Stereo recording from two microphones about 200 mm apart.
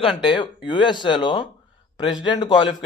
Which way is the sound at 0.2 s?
25° left (ahead or behind).